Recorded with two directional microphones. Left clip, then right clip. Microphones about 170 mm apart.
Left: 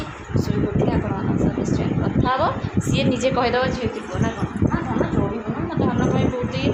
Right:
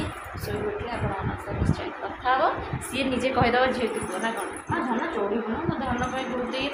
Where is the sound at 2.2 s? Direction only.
30° left (ahead or behind).